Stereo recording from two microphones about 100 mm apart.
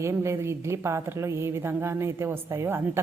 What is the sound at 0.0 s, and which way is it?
A woman's voice, 30° right (ahead or behind).